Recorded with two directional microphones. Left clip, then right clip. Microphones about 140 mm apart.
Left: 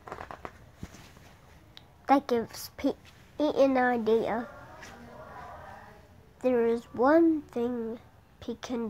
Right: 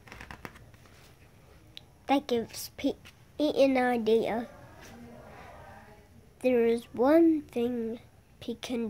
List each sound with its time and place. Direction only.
2.0 s a woman's voice: centre (ahead or behind); by 4.5 s 20° right (ahead or behind)
6.4 s a woman's voice: 25° right (ahead or behind)